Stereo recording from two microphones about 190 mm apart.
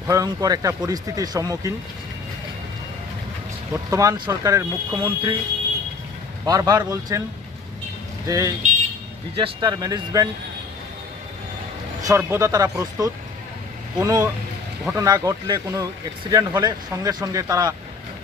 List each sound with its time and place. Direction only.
0.0 s speech: 20° right (ahead or behind)
3.7 s speech: 15° right (ahead or behind)
6.4 s speech: 20° right (ahead or behind)
8.3 s speech: 15° right (ahead or behind)
12.1 s speech: 15° right (ahead or behind)